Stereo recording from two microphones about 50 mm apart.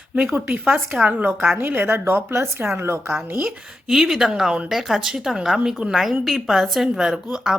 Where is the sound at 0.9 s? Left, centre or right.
Right.